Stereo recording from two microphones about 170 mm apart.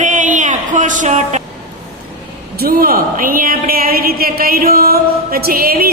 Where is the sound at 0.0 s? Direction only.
45° right (ahead or behind).